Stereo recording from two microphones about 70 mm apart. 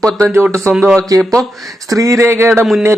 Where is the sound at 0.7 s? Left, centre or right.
Centre.